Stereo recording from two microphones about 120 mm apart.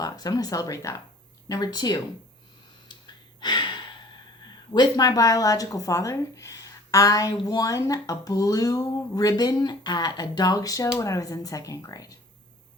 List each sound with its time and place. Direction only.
0.0 s speech: 35° left (ahead or behind)
2.9 s gasp: 35° left (ahead or behind)
4.7 s speech: 35° left (ahead or behind)